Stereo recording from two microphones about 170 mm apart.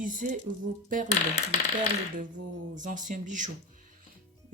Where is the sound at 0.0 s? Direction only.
50° right (ahead or behind).